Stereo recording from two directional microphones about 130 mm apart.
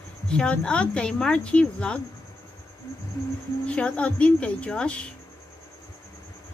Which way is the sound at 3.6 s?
10° left (ahead or behind).